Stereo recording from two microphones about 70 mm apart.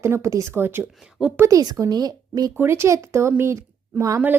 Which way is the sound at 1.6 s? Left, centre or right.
Right.